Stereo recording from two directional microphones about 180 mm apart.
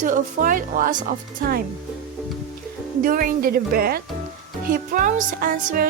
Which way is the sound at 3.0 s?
50° right (ahead or behind).